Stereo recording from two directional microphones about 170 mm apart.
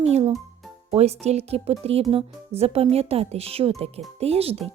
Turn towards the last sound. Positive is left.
turn(degrees=-35)  # may be behind; listen again after turning